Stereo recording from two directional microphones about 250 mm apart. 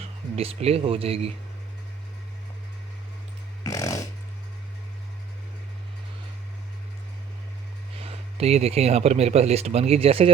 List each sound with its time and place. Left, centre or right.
0.0 s speech: right
3.6 s a sound: centre
7.9 s speech: right